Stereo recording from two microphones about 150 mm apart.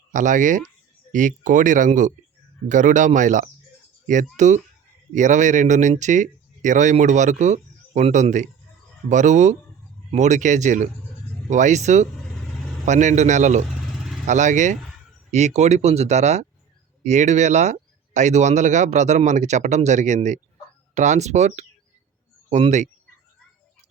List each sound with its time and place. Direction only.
0.1 s a man's voice: 55° right (ahead or behind)